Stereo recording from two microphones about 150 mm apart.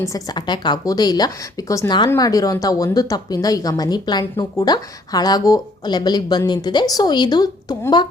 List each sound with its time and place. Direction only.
0.0 s speech: 25° left (ahead or behind)